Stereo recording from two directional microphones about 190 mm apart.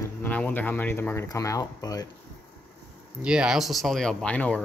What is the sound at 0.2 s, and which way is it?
Speech, 10° left (ahead or behind).